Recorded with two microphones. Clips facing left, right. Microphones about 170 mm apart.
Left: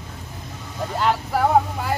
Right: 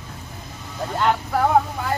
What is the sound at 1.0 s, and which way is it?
Speech, 5° left (ahead or behind).